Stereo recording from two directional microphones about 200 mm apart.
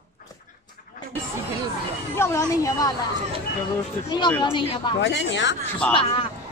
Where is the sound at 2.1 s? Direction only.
15° left (ahead or behind).